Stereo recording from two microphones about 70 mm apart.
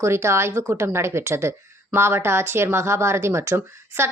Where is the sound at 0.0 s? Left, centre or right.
Right.